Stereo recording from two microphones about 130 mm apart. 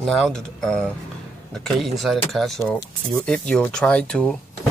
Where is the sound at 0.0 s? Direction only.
5° left (ahead or behind).